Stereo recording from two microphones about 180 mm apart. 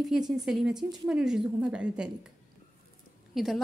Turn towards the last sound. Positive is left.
turn(degrees=0)  # may be behind; listen again after turning